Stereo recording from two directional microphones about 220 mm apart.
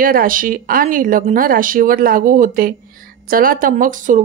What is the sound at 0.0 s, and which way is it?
Speech, 40° right (ahead or behind).